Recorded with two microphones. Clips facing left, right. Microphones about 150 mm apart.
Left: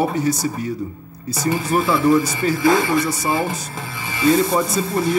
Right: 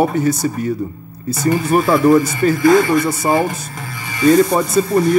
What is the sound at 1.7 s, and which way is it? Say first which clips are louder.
Speech: right 4 dB; 55° right (ahead or behind).